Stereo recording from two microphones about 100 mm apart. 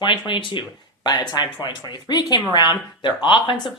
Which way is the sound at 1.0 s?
40° left (ahead or behind).